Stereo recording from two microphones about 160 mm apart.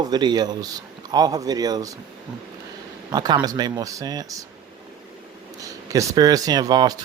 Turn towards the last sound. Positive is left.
turn(degrees=-25)  # may be behind; listen again after turning